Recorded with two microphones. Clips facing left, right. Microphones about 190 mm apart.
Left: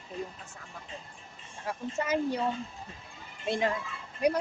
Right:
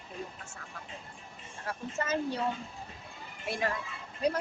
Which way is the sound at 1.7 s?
15° left (ahead or behind).